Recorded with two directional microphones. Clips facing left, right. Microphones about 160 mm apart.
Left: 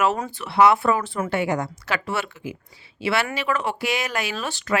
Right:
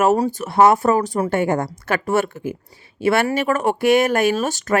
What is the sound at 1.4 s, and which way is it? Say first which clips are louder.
Speech: right 4 dB; 50° right (ahead or behind).